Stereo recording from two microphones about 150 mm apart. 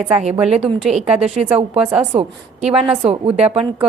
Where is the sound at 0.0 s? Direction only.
45° right (ahead or behind).